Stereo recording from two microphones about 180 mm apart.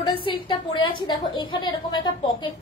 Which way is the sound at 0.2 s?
30° left (ahead or behind).